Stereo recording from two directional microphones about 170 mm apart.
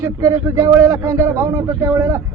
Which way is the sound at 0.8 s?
20° right (ahead or behind).